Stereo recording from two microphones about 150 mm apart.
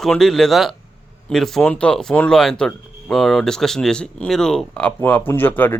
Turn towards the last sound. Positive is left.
turn(degrees=10)  # may be behind; listen again after turning